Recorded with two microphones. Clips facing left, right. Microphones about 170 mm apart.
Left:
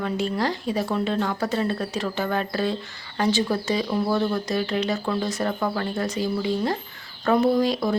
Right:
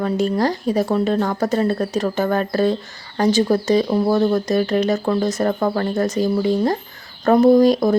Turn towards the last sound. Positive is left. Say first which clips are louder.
# right 8 dB
turn(degrees=-45)  # may be behind; listen again after turning